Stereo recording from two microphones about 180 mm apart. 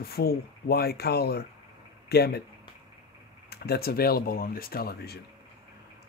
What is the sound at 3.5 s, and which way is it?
Speech, 60° left (ahead or behind).